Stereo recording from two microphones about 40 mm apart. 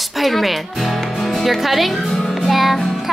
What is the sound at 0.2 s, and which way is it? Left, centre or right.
Speech, centre.